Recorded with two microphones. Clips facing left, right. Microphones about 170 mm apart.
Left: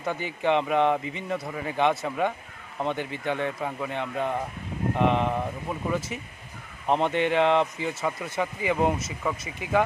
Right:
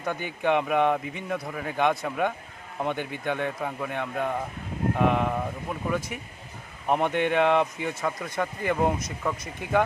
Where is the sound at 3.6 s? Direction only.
Centre (ahead or behind).